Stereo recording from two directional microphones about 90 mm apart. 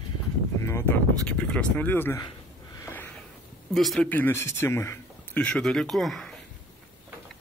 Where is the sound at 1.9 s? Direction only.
25° left (ahead or behind).